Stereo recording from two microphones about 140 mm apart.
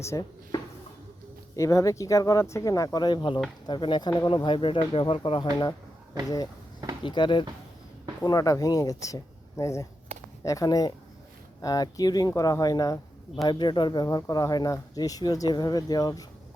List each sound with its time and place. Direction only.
0.0 s speech: 25° left (ahead or behind)